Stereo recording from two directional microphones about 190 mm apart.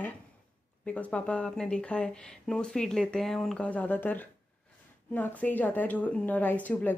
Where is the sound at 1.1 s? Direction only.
5° left (ahead or behind).